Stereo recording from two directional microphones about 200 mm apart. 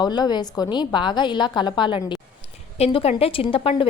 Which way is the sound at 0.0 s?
20° left (ahead or behind).